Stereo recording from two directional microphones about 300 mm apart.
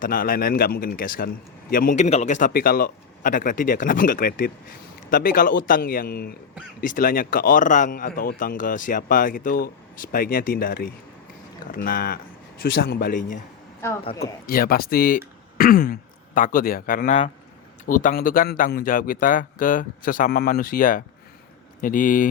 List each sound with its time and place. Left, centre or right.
0.0 s speech: left
14.2 s speech: left